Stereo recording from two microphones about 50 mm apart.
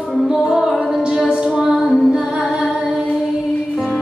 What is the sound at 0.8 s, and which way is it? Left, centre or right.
A capella, centre.